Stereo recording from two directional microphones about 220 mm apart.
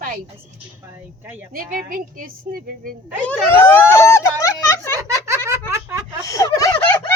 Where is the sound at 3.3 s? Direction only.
10° left (ahead or behind).